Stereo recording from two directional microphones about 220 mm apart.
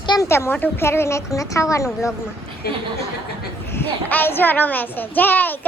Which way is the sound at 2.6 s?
45° left (ahead or behind).